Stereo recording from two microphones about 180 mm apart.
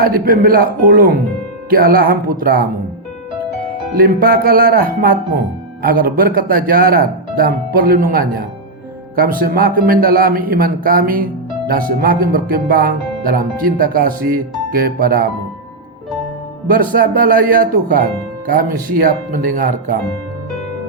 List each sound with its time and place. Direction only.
0.0 s speech: 55° right (ahead or behind)
3.9 s speech: 55° right (ahead or behind)
16.6 s speech: 50° right (ahead or behind)
19.0 s speech: 50° right (ahead or behind)